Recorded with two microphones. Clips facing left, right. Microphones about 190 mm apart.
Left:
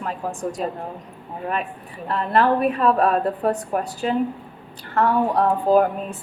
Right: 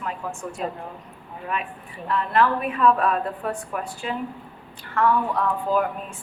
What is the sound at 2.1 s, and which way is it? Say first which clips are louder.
A woman's voice: left 2 dB; 40° left (ahead or behind).